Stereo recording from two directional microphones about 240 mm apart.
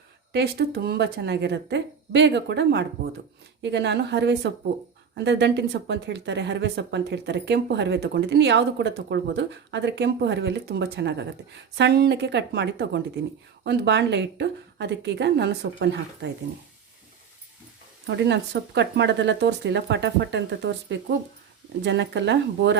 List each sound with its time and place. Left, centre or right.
0.3 s speech: right
18.0 s speech: right